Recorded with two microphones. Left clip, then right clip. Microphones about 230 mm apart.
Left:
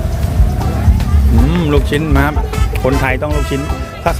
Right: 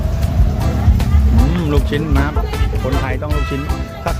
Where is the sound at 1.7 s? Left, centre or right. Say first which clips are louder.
Left 6 dB; centre.